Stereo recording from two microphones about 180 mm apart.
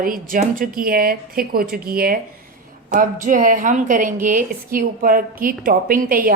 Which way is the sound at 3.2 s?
45° right (ahead or behind).